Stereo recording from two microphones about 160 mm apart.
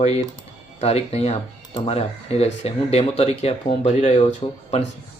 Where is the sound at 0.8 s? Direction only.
40° left (ahead or behind).